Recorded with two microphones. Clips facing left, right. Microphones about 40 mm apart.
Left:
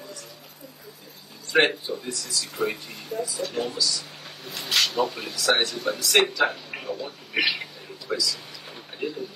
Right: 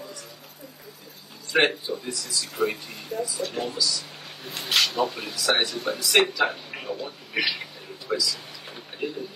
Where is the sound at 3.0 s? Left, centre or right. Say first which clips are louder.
Even; right.